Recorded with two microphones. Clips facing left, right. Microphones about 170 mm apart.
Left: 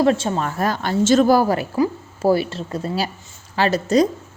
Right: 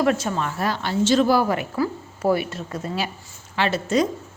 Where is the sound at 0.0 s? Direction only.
30° left (ahead or behind).